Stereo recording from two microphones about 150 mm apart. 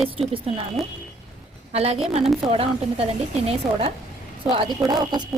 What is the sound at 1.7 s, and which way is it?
A woman's voice, 45° right (ahead or behind).